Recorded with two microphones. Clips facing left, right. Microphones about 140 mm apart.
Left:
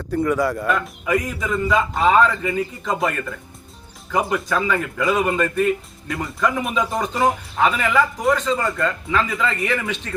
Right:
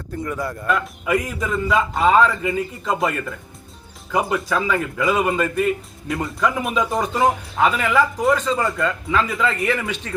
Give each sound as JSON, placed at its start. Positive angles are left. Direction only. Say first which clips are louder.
{"t": 0.1, "sound": "speech", "louder": "left 7 dB", "side_deg": 90}
{"t": 1.0, "sound": "speech", "louder": "even", "side_deg": -5}